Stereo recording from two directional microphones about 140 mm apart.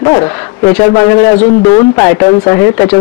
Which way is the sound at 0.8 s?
15° left (ahead or behind).